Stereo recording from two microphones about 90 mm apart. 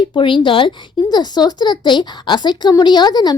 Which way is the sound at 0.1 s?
70° left (ahead or behind).